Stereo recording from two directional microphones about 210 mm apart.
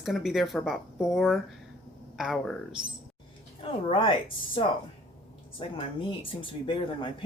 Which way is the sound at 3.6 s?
25° left (ahead or behind).